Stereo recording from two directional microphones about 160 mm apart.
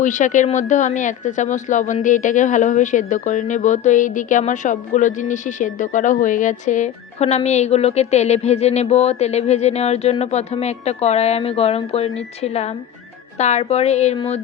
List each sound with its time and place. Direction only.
0.0 s speech: 50° left (ahead or behind)